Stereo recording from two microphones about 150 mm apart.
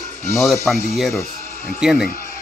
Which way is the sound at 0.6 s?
Centre (ahead or behind).